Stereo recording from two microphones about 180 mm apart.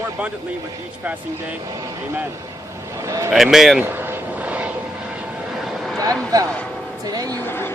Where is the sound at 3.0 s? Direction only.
15° right (ahead or behind).